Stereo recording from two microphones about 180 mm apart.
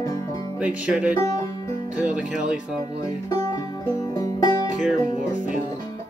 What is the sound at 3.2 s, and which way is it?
Music, 20° left (ahead or behind).